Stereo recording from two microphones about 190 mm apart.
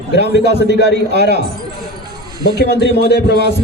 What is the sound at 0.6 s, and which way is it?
Speech, 65° left (ahead or behind).